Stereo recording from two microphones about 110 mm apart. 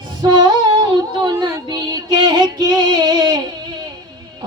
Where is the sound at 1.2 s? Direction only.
45° right (ahead or behind).